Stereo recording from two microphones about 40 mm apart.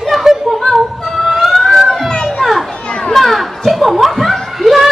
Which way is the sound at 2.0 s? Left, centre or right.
Centre.